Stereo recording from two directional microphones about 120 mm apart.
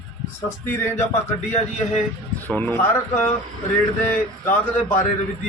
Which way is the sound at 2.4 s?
15° left (ahead or behind).